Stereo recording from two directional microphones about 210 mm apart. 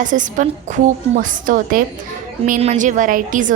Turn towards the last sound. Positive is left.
turn(degrees=-40)  # may be behind; listen again after turning